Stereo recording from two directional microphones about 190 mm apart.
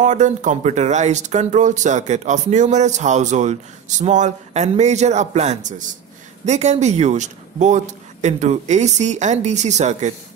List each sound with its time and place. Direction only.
0.0 s speech: 40° right (ahead or behind)